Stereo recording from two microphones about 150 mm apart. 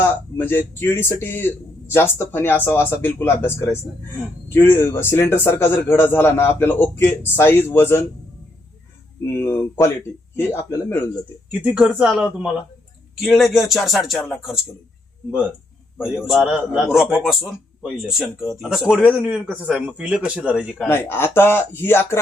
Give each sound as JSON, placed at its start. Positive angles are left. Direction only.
{"t": 0.0, "sound": "speech", "side_deg": 15}
{"t": 9.2, "sound": "speech", "side_deg": 15}
{"t": 11.6, "sound": "speech", "side_deg": -5}
{"t": 16.0, "sound": "speech", "side_deg": -5}
{"t": 18.0, "sound": "speech", "side_deg": -5}
{"t": 20.8, "sound": "speech", "side_deg": 15}